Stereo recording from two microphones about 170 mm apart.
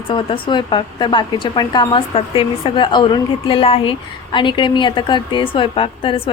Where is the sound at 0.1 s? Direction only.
30° left (ahead or behind).